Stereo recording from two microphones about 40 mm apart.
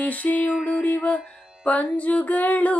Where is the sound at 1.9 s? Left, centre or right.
Left.